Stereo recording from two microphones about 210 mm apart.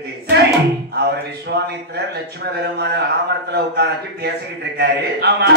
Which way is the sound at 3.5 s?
50° right (ahead or behind).